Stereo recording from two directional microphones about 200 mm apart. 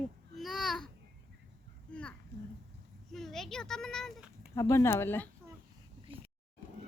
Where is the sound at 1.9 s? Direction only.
5° left (ahead or behind).